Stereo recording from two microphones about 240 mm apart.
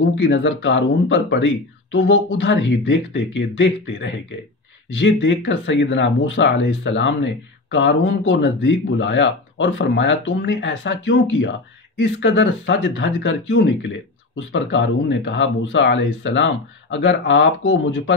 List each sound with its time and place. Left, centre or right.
0.2 s speech: left